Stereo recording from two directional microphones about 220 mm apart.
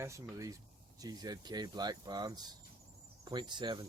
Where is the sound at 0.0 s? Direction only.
15° right (ahead or behind).